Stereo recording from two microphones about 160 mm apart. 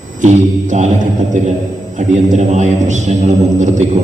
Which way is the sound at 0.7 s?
50° right (ahead or behind).